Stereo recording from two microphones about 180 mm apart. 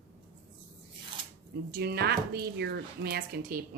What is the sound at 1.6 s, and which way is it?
A woman's voice, 60° right (ahead or behind).